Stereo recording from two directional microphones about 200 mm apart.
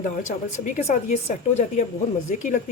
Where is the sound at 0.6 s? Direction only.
35° left (ahead or behind).